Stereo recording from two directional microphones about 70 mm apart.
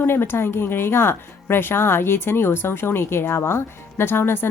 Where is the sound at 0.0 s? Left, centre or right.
Left.